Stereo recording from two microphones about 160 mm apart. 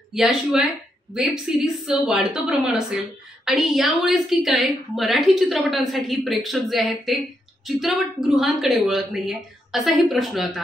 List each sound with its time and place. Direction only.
0.1 s a woman's voice: 5° right (ahead or behind)